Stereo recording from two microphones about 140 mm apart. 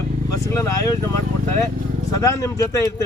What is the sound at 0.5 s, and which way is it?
Speech, 25° left (ahead or behind).